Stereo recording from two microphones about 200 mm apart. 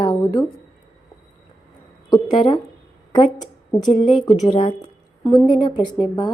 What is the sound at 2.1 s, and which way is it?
Speech, 25° left (ahead or behind).